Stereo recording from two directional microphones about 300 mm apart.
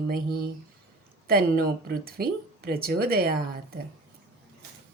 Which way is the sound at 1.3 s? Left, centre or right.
Right.